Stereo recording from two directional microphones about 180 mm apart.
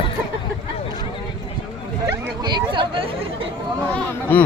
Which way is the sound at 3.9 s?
10° left (ahead or behind).